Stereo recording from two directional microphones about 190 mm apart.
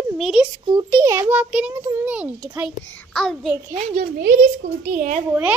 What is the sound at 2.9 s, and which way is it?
Speech, 5° left (ahead or behind).